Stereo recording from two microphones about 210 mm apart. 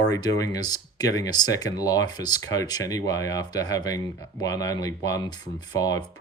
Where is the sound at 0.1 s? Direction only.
20° left (ahead or behind).